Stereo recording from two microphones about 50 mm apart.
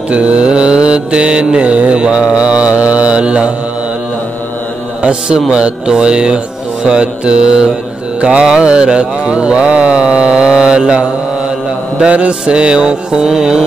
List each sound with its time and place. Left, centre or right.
0.1 s mantra: right
5.5 s mantra: centre